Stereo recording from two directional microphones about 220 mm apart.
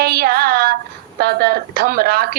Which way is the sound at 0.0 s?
45° right (ahead or behind).